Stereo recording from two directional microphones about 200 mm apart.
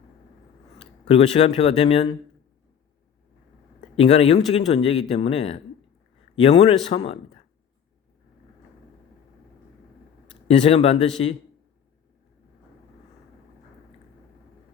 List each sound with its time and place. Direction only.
1.0 s speech: 30° left (ahead or behind)
3.9 s speech: 30° left (ahead or behind)
10.6 s speech: 30° left (ahead or behind)